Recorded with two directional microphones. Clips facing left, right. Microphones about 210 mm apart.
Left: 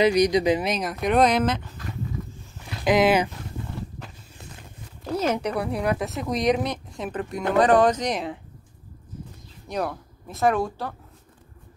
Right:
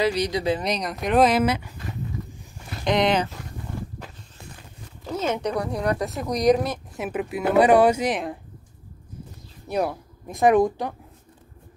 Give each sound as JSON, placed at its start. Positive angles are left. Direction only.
{"t": 0.0, "sound": "speech", "side_deg": 15}
{"t": 0.7, "sound": "speech", "side_deg": 0}
{"t": 2.8, "sound": "speech", "side_deg": 5}
{"t": 5.3, "sound": "speech", "side_deg": 10}
{"t": 9.7, "sound": "speech", "side_deg": -10}